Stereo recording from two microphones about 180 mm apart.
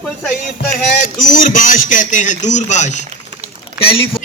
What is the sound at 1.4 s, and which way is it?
Speech, 50° left (ahead or behind).